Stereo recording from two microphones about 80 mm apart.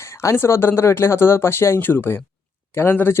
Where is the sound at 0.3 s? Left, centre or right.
Left.